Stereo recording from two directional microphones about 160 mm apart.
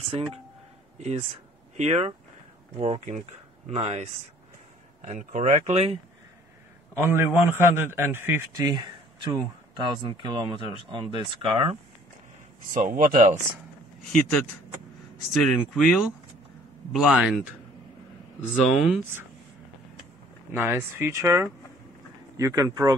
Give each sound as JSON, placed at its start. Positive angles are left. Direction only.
{"t": 0.0, "sound": "speech", "side_deg": -35}
{"t": 1.8, "sound": "speech", "side_deg": -40}
{"t": 7.0, "sound": "a man's voice", "side_deg": -15}
{"t": 8.5, "sound": "speech", "side_deg": -25}
{"t": 12.7, "sound": "speech", "side_deg": -60}
{"t": 15.3, "sound": "speech", "side_deg": 0}
{"t": 18.5, "sound": "speech", "side_deg": 5}
{"t": 20.5, "sound": "a man's voice", "side_deg": -15}